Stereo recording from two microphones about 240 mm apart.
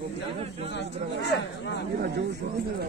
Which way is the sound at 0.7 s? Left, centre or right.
Left.